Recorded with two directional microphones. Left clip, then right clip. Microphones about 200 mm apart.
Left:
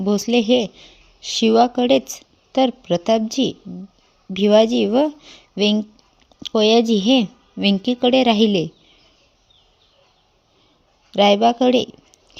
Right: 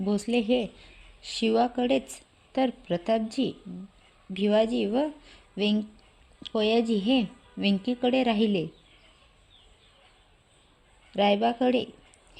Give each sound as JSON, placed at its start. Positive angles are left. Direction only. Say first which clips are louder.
{"t": 0.0, "sound": "speech", "louder": "left 9 dB", "side_deg": 30}
{"t": 11.1, "sound": "speech", "louder": "left 10 dB", "side_deg": 25}